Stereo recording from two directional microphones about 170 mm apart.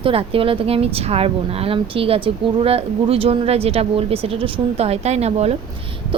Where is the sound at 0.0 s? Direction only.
35° right (ahead or behind).